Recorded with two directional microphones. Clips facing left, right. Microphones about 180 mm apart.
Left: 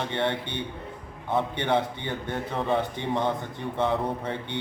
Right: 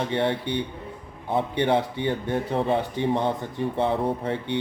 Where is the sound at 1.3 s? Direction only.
15° right (ahead or behind).